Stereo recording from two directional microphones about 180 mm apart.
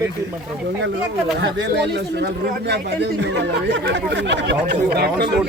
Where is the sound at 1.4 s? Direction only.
70° right (ahead or behind).